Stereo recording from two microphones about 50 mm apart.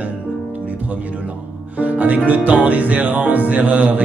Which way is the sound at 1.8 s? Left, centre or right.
Right.